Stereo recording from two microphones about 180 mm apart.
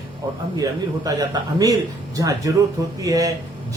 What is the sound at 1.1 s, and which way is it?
A man's voice, 20° right (ahead or behind).